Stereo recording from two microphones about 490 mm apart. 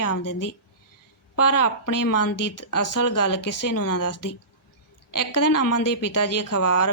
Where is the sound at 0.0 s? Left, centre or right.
Left.